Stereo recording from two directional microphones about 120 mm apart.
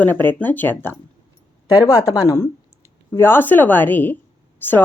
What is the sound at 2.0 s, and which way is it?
Speech, 30° left (ahead or behind).